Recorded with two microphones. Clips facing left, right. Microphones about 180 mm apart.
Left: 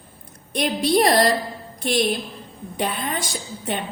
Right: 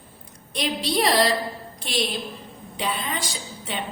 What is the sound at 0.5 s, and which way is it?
A woman's voice, 50° left (ahead or behind).